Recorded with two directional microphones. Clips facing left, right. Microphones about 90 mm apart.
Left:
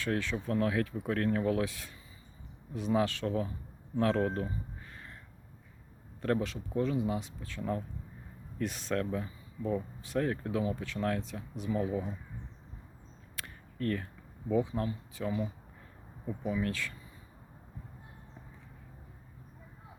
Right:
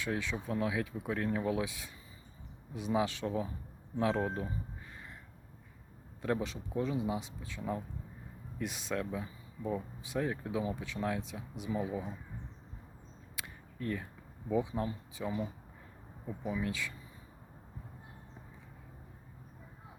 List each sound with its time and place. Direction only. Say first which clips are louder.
0.0 s speech: left 3 dB; 10° right (ahead or behind)
6.2 s speech: left 3 dB; 15° right (ahead or behind)
13.3 s single-lens reflex camera: left 2 dB; 15° right (ahead or behind)
14.5 s speech: left 2 dB; 15° right (ahead or behind)